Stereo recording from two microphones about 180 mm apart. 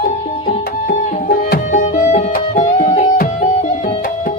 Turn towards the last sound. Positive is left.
turn(degrees=45)  # may be behind; listen again after turning